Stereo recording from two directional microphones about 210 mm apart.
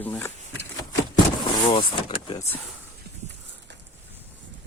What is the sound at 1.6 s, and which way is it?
Speech, 25° left (ahead or behind).